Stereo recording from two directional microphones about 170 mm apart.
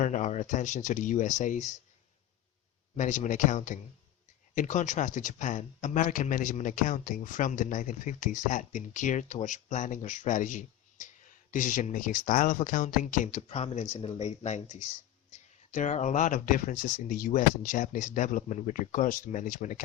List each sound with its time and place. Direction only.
0.0 s speech: 45° left (ahead or behind)
3.0 s speech: 45° left (ahead or behind)